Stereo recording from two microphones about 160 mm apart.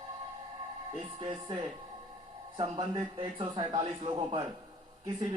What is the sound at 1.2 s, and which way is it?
A man's voice, 30° right (ahead or behind).